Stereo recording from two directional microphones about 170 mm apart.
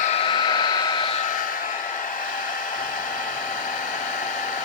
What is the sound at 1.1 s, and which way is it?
Hair dryer, 50° left (ahead or behind).